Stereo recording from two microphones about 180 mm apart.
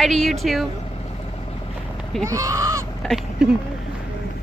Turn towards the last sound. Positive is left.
turn(degrees=0)  # may be behind; listen again after turning